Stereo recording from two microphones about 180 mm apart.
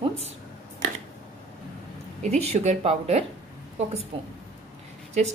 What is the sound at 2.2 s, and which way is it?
A woman's voice, 35° right (ahead or behind).